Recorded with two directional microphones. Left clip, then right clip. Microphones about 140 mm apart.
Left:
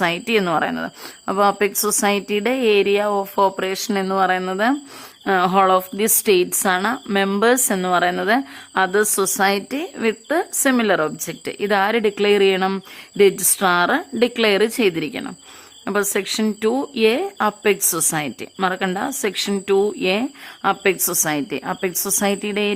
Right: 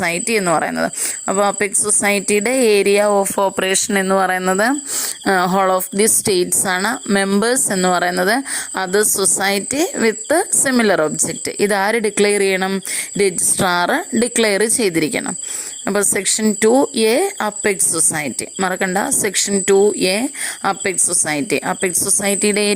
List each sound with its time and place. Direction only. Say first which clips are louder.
0.0 s a woman's voice: right 1 dB; 35° right (ahead or behind)
3.4 s a woman's voice: right 2 dB; 50° right (ahead or behind)
4.1 s a woman's voice: right 2 dB; 40° right (ahead or behind)